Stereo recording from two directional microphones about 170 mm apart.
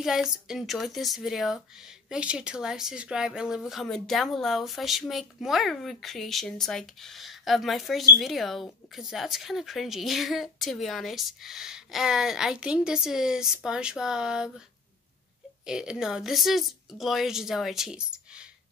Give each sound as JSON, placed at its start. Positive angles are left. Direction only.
{"t": 0.0, "sound": "speech", "side_deg": -5}
{"t": 15.6, "sound": "speech", "side_deg": -5}